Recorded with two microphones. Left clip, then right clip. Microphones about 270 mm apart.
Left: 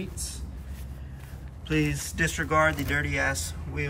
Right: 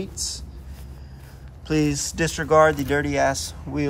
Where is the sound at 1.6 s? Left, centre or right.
Centre.